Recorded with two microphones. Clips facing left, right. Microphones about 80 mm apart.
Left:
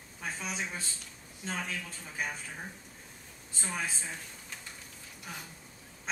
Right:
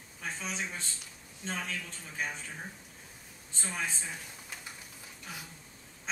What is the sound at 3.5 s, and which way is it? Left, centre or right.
Speech, centre.